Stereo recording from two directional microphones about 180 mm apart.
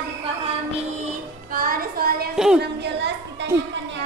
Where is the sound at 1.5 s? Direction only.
55° right (ahead or behind).